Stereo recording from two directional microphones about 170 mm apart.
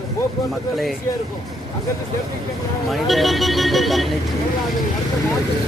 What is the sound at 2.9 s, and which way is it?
Speech, centre (ahead or behind).